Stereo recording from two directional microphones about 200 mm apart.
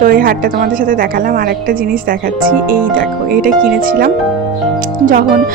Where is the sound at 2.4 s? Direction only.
45° right (ahead or behind).